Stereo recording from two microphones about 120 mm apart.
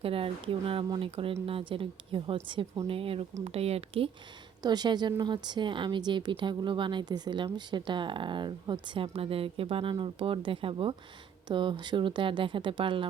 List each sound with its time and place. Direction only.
0.0 s a woman's voice: 50° right (ahead or behind)
4.6 s a woman's voice: 35° right (ahead or behind)